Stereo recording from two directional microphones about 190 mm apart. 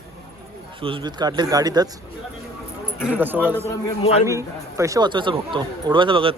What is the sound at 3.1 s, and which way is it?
A man's voice, 10° right (ahead or behind).